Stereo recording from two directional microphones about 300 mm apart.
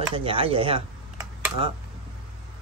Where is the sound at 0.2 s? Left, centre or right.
Centre.